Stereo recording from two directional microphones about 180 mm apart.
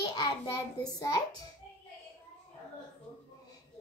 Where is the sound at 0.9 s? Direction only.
20° left (ahead or behind).